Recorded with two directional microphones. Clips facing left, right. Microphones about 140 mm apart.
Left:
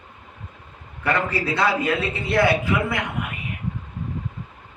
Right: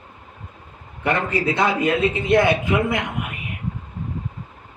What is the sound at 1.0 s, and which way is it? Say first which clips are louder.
A man's voice: right 2 dB; 20° right (ahead or behind).